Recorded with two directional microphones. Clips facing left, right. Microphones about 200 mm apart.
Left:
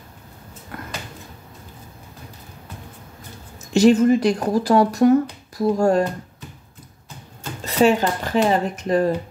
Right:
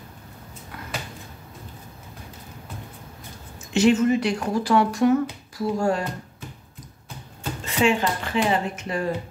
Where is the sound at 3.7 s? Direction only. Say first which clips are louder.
Left 4 dB; 35° left (ahead or behind).